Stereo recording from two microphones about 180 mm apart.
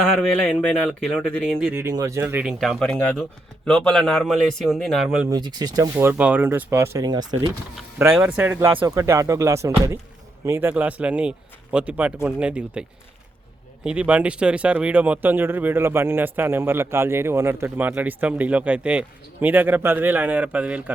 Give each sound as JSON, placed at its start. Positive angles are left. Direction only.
{"t": 0.7, "sound": "speech", "side_deg": 5}
{"t": 1.7, "sound": "speech", "side_deg": -15}
{"t": 5.3, "sound": "speech", "side_deg": -20}
{"t": 7.8, "sound": "speech", "side_deg": -5}
{"t": 13.8, "sound": "speech", "side_deg": -5}